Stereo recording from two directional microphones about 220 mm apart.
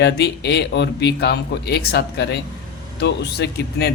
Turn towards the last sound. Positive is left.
turn(degrees=50)  # may be behind; listen again after turning